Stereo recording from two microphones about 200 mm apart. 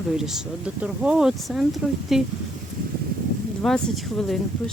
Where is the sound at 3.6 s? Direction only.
Centre (ahead or behind).